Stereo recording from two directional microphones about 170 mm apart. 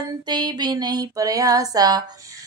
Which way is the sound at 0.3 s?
25° right (ahead or behind).